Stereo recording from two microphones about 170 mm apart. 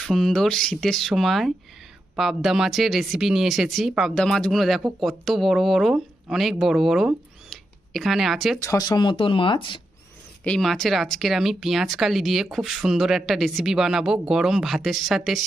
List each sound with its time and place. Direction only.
0.0 s speech: centre (ahead or behind)
7.5 s a sound: centre (ahead or behind)
8.6 s speech: 20° left (ahead or behind)
10.4 s speech: 5° left (ahead or behind)